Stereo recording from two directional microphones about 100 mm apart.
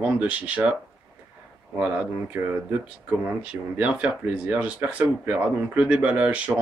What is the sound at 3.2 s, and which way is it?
Speech, 15° right (ahead or behind).